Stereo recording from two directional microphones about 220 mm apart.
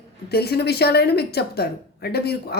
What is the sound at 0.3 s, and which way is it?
A woman's voice, 45° left (ahead or behind).